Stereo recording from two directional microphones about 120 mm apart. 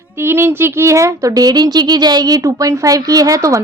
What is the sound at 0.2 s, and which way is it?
A woman's voice, 20° right (ahead or behind).